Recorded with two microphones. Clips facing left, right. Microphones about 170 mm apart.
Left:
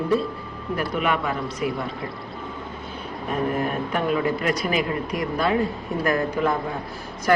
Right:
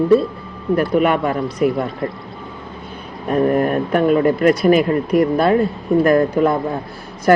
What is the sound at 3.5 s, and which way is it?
Speech, 55° right (ahead or behind).